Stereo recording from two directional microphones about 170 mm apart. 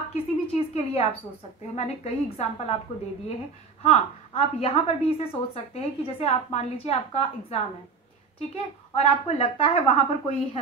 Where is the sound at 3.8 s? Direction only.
35° left (ahead or behind).